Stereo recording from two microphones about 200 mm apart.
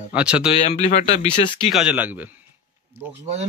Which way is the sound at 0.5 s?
30° left (ahead or behind).